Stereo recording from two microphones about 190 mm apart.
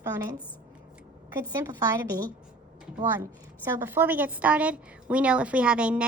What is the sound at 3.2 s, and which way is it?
A woman's voice, 10° right (ahead or behind).